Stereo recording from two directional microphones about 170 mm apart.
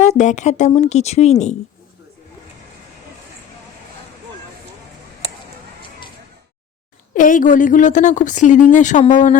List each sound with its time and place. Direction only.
0.0 s a woman's voice: 45° left (ahead or behind)
7.1 s a woman's voice: 50° left (ahead or behind)